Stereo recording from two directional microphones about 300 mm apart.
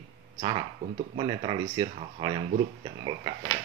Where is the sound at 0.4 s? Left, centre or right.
Centre.